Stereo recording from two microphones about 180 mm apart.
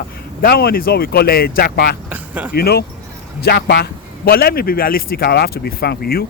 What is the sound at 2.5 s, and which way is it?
Speech, 60° left (ahead or behind).